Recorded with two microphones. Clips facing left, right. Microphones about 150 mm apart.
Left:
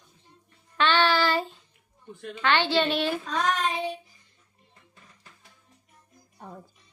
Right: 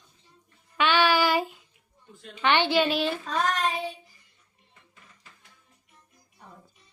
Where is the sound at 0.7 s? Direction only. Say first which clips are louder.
Even; 10° right (ahead or behind).